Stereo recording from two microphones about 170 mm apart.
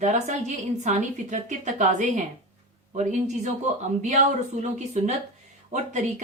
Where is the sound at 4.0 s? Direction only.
45° right (ahead or behind).